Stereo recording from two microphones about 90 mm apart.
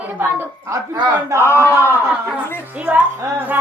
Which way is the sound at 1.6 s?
20° right (ahead or behind).